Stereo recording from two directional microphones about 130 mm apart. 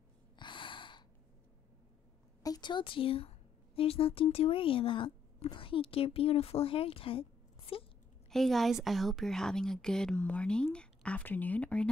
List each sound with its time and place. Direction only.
0.4 s snort: 40° left (ahead or behind)
2.4 s a woman's voice: 35° left (ahead or behind)
8.3 s a woman's voice: centre (ahead or behind)